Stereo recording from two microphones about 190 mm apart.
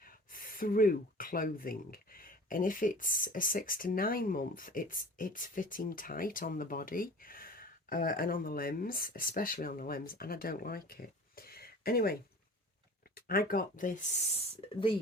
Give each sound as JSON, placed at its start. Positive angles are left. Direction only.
{"t": 0.0, "sound": "speech", "side_deg": 50}
{"t": 11.3, "sound": "a sound", "side_deg": 55}
{"t": 13.1, "sound": "speech", "side_deg": 50}
{"t": 14.6, "sound": "speech", "side_deg": 30}